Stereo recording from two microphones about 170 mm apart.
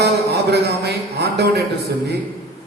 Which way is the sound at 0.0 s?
75° right (ahead or behind).